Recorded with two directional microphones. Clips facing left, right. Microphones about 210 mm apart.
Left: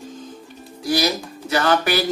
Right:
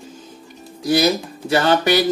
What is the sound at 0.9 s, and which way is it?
Music, 25° right (ahead or behind).